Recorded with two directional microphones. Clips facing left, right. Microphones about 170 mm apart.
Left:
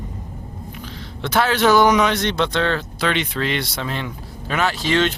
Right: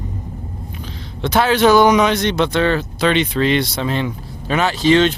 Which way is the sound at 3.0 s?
20° right (ahead or behind).